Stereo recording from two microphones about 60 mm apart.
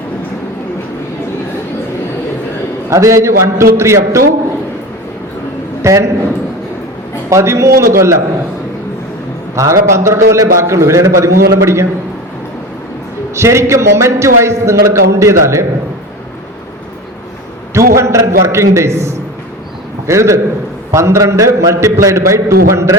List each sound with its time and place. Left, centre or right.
2.9 s a man's voice: right
5.8 s a man's voice: right
7.3 s a man's voice: right
9.6 s a man's voice: right
13.3 s a man's voice: right
17.7 s a man's voice: right